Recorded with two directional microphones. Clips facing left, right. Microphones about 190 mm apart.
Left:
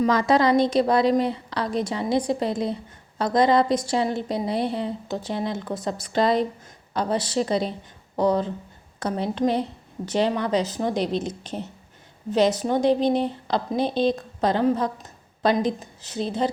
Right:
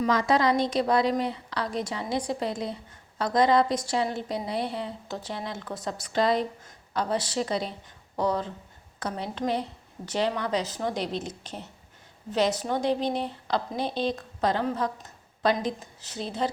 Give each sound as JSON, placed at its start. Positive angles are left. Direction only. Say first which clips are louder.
{"t": 0.0, "sound": "a woman's voice", "louder": "left 4 dB", "side_deg": 35}